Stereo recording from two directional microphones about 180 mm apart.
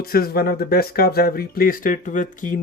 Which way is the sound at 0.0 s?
55° left (ahead or behind).